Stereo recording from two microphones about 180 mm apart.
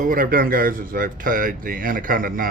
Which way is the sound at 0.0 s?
50° right (ahead or behind).